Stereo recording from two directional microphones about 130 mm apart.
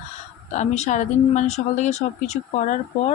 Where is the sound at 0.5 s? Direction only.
65° left (ahead or behind).